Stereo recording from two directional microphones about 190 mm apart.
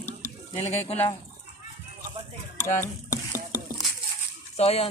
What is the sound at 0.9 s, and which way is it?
Speech, 35° left (ahead or behind).